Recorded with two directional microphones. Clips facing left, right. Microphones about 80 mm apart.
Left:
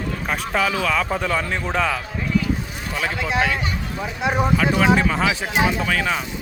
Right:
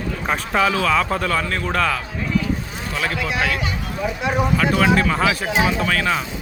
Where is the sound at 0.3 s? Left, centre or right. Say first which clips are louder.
Right 3 dB; centre.